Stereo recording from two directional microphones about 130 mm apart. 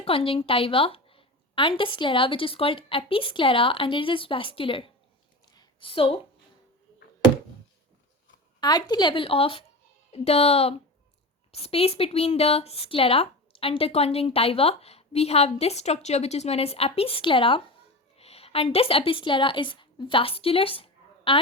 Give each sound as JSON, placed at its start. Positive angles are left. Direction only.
{"t": 0.0, "sound": "speech", "side_deg": 45}
{"t": 5.5, "sound": "a sound", "side_deg": 45}
{"t": 8.6, "sound": "a woman's voice", "side_deg": 35}